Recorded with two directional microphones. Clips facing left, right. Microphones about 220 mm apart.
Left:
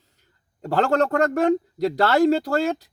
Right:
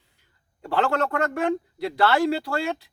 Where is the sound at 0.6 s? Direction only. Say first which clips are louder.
Left 4 dB; 40° left (ahead or behind).